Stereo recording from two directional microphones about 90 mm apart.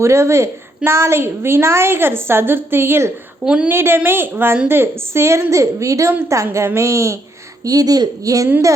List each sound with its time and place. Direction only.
0.0 s a woman's voice: 30° right (ahead or behind)
3.4 s a woman's voice: 10° right (ahead or behind)
3.7 s a woman's voice: 25° right (ahead or behind)